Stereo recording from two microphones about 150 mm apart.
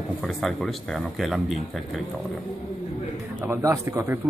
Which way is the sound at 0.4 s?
Centre (ahead or behind).